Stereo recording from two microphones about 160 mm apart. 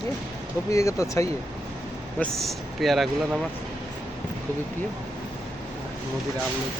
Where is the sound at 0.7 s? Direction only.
20° left (ahead or behind).